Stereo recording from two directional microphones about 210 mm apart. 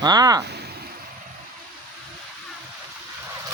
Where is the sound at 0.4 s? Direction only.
50° right (ahead or behind).